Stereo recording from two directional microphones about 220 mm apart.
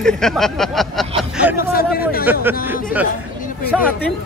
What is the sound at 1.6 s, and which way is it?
Speech, 40° left (ahead or behind).